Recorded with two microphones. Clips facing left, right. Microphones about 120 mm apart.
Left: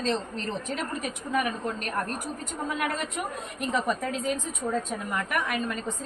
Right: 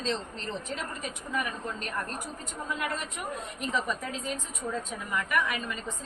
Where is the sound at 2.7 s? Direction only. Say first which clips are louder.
Left 5 dB; 60° left (ahead or behind).